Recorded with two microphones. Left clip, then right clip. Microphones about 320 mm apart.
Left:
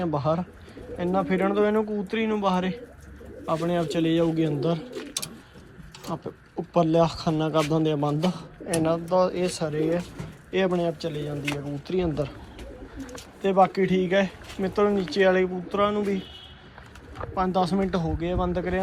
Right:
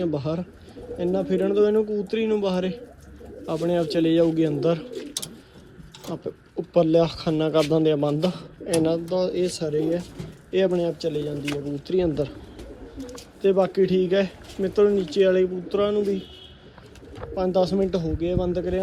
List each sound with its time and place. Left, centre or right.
0.0 s speech: centre
6.1 s speech: centre
11.5 s speech: centre
11.9 s speech: centre
13.4 s speech: centre
17.3 s speech: centre